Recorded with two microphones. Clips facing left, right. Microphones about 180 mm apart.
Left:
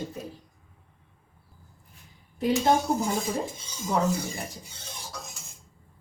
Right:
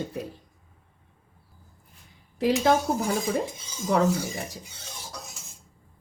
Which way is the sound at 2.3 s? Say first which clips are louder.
Right 2 dB; 75° right (ahead or behind).